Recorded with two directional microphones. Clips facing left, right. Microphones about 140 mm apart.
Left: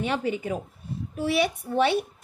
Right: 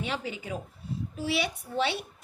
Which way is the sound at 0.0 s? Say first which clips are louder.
Left 7 dB; 55° left (ahead or behind).